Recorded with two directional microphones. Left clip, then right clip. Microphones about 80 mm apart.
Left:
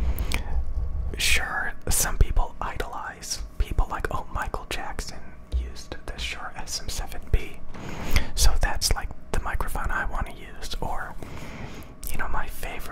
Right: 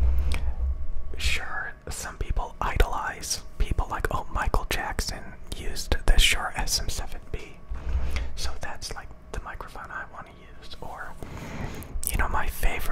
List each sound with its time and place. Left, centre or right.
0.1 s squish: left
1.1 s whispering: left
2.2 s whispering: centre
2.8 s whispering: right
3.5 s whispering: centre
5.5 s whispering: right
6.5 s whispering: right
7.2 s whispering: left
7.8 s mechanisms: left
8.1 s whispering: left
11.5 s whispering: right